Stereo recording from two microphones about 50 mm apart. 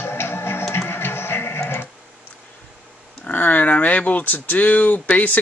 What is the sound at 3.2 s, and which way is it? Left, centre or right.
Speech, left.